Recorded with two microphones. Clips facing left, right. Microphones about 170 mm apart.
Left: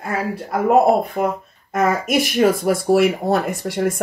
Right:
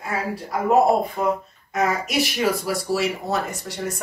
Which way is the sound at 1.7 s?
50° left (ahead or behind).